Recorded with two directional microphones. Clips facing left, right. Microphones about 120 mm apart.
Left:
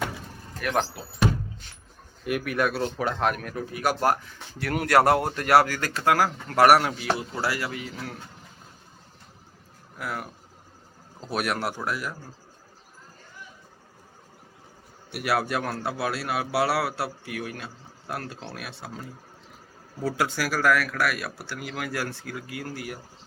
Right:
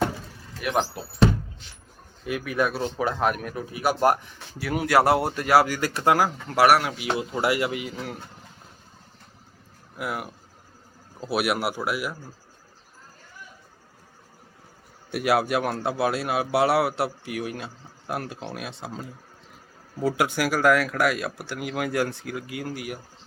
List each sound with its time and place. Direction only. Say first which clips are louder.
0.6 s speech: right 1 dB; 15° right (ahead or behind)
2.3 s speech: even; centre (ahead or behind); by 4.6 s 15° right (ahead or behind)
4.6 s speech: even; 5° right (ahead or behind)
5.6 s speech: right 2 dB; 15° right (ahead or behind)
6.7 s speech: left 2 dB; centre (ahead or behind)
7.0 s speech: right 2 dB; 20° right (ahead or behind)
10.0 s speech: right 2 dB; 15° right (ahead or behind)
15.2 s speech: right 4 dB; 15° right (ahead or behind)